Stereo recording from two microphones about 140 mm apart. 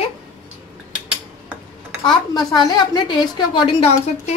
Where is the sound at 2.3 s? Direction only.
30° left (ahead or behind).